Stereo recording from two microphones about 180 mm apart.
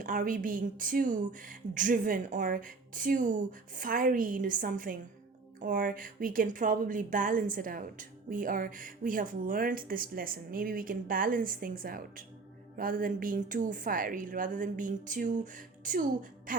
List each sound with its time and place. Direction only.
0.0 s a woman's voice: 50° right (ahead or behind)